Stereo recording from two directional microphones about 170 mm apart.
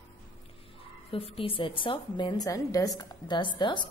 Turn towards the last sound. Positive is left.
turn(degrees=25)  # may be behind; listen again after turning